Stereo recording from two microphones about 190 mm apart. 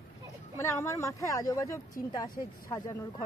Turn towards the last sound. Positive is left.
turn(degrees=15)  # may be behind; listen again after turning